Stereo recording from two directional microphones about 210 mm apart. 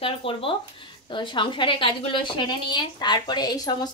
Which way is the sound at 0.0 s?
25° left (ahead or behind).